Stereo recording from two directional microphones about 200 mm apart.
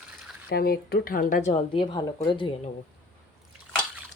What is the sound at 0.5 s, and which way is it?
A woman's voice, 50° left (ahead or behind).